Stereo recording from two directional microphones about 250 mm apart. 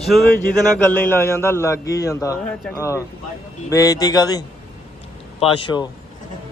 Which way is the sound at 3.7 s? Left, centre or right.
Centre.